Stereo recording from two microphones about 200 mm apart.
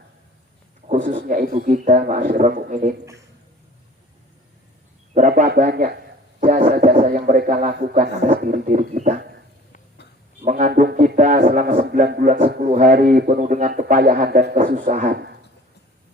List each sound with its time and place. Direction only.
0.9 s a man's voice: 40° right (ahead or behind)
5.1 s a man's voice: 40° right (ahead or behind)
10.4 s a man's voice: 45° right (ahead or behind)